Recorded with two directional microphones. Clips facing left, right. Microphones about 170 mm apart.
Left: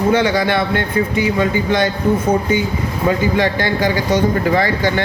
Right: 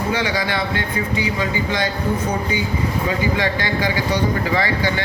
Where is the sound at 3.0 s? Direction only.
50° left (ahead or behind).